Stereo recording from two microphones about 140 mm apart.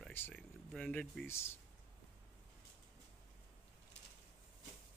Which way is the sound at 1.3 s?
15° left (ahead or behind).